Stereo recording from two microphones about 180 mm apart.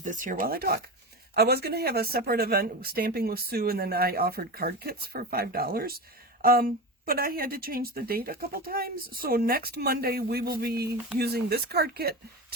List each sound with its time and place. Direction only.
0.0 s speech: 45° right (ahead or behind); by 12.5 s 60° right (ahead or behind)